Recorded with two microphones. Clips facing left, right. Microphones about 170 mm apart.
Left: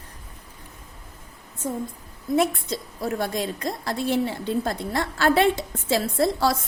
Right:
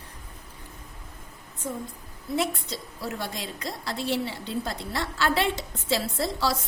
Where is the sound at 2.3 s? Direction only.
50° left (ahead or behind).